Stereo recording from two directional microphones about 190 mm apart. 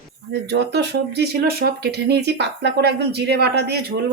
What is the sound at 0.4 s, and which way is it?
Speech, 65° right (ahead or behind).